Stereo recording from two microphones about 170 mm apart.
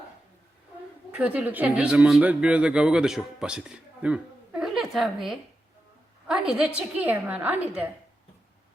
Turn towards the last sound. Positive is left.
turn(degrees=-10)  # may be behind; listen again after turning